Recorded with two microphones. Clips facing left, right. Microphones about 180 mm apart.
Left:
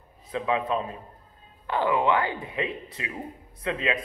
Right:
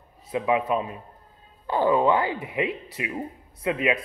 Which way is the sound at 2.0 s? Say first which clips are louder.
Right 2 dB; 20° right (ahead or behind).